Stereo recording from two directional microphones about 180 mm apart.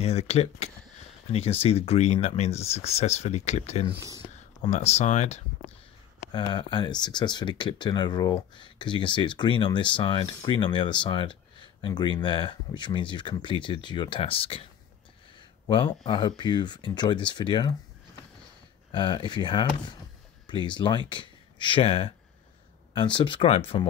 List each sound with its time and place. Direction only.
0.0 s speech: 35° left (ahead or behind)
3.9 s speech: 15° right (ahead or behind)
4.6 s speech: 35° left (ahead or behind)
6.3 s speech: 25° left (ahead or behind)
15.6 s speech: 25° left (ahead or behind)
18.9 s speech: 25° left (ahead or behind)